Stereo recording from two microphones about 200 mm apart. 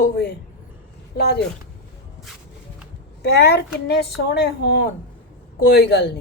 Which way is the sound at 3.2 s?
55° left (ahead or behind).